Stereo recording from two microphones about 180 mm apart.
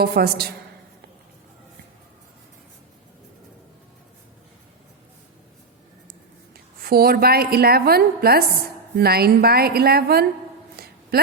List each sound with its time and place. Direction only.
0.0 s a woman's voice: 60° right (ahead or behind)
6.7 s a woman's voice: 55° right (ahead or behind)